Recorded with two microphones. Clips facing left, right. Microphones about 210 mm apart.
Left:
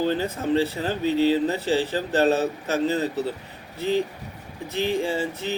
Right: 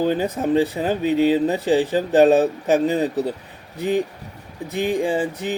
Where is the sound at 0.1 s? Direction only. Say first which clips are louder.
Right 4 dB; 15° right (ahead or behind).